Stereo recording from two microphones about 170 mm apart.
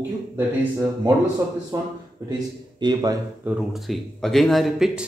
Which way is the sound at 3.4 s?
5° right (ahead or behind).